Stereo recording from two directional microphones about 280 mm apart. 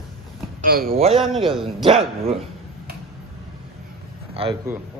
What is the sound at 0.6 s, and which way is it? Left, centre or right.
Speech, right.